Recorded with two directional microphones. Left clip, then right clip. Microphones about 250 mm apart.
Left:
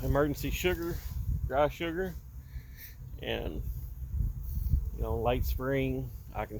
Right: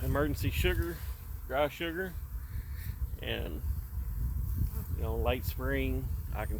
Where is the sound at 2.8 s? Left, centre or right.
Left.